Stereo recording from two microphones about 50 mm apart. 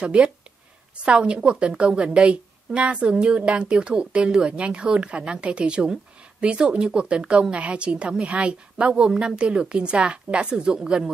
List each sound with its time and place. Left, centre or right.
0.0 s a woman's voice: right